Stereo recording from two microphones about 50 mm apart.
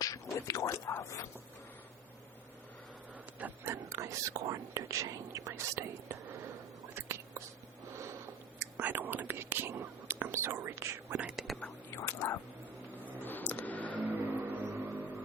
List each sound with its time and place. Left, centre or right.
0.3 s a sound: left
3.6 s whispering: right
6.9 s whispering: right
8.5 s whispering: right
9.2 s whispering: right
10.3 s whispering: right
11.4 s whispering: centre
11.9 s a sound: left
13.1 s a sound: left
14.0 s vehicle: right